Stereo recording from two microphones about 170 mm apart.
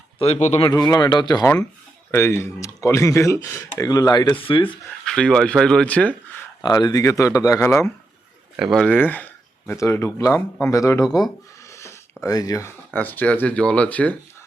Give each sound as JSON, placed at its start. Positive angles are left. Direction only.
{"t": 0.2, "sound": "speech", "side_deg": 40}
{"t": 0.7, "sound": "speech", "side_deg": 20}
{"t": 5.0, "sound": "speech", "side_deg": 5}
{"t": 6.6, "sound": "speech", "side_deg": 25}
{"t": 8.5, "sound": "speech", "side_deg": 0}
{"t": 11.7, "sound": "a sound", "side_deg": 15}
{"t": 12.2, "sound": "speech", "side_deg": 20}